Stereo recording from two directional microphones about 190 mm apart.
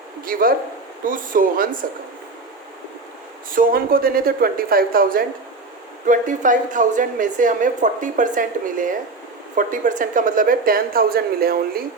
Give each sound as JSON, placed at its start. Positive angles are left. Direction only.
{"t": 0.3, "sound": "a woman's voice", "side_deg": -50}
{"t": 3.5, "sound": "a woman's voice", "side_deg": -50}